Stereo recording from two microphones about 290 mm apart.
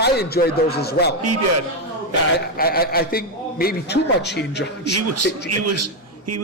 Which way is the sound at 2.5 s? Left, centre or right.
Left.